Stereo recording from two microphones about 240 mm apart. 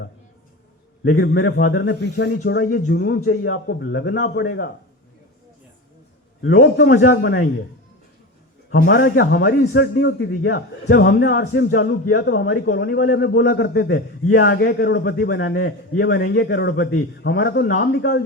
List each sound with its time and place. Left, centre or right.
1.1 s a man's voice: left
3.2 s a man's voice: left
6.4 s a man's voice: left
8.7 s a man's voice: left
15.4 s a man's voice: left